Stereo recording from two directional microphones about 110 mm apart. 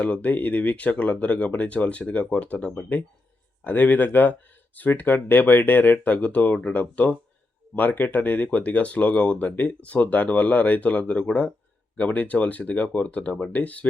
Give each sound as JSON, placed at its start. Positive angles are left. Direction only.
{"t": 0.0, "sound": "speech", "side_deg": 15}